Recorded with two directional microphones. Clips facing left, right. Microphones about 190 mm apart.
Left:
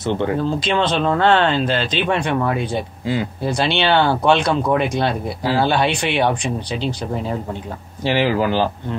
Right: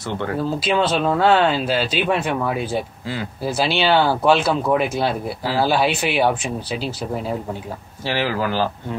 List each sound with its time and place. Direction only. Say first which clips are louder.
0.4 s speech: left 1 dB; 5° right (ahead or behind)
8.0 s speech: left 5 dB; 20° left (ahead or behind)